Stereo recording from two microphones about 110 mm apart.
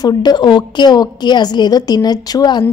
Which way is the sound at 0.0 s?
40° left (ahead or behind).